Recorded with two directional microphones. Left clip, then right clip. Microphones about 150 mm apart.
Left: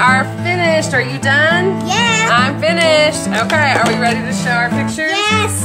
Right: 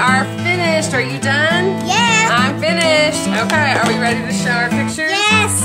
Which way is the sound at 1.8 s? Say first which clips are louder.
Right 2 dB; 25° right (ahead or behind).